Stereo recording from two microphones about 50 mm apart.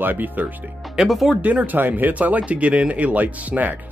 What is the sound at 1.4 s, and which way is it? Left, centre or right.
Speech, right.